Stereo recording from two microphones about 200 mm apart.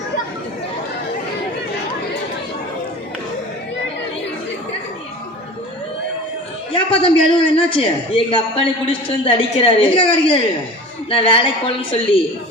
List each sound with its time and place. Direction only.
6.7 s a man's voice: 25° left (ahead or behind)